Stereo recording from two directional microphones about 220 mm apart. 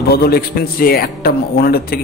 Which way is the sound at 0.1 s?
45° left (ahead or behind).